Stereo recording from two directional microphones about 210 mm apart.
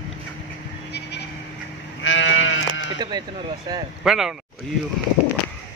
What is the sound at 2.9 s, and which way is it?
Speech, 20° right (ahead or behind).